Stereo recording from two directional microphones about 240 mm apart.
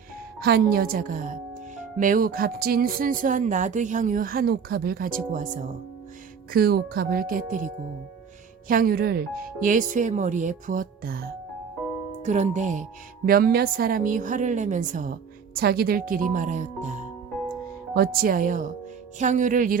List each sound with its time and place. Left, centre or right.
0.4 s a woman's voice: right